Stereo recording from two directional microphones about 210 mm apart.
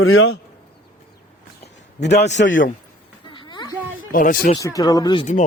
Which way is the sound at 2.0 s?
55° left (ahead or behind).